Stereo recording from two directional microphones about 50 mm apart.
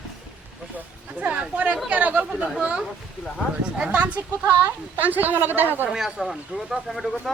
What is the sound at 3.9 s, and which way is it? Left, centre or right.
A woman's voice, right.